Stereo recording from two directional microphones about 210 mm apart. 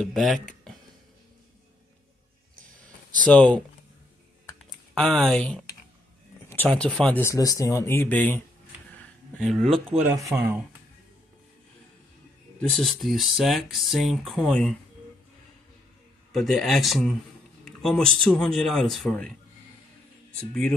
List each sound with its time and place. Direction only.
0.0 s speech: centre (ahead or behind)
3.3 s speech: 5° left (ahead or behind)
4.9 s speech: centre (ahead or behind)
9.4 s speech: centre (ahead or behind)
10.0 s speech: 15° right (ahead or behind)
12.8 s speech: centre (ahead or behind)
16.3 s speech: centre (ahead or behind)